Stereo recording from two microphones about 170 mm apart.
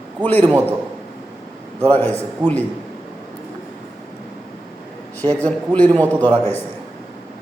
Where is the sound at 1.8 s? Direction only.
10° left (ahead or behind).